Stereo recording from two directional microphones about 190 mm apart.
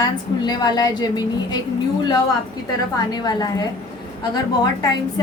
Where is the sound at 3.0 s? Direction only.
20° left (ahead or behind).